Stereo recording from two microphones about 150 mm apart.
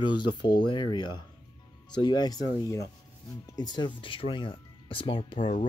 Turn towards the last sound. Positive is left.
turn(degrees=35)  # may be behind; listen again after turning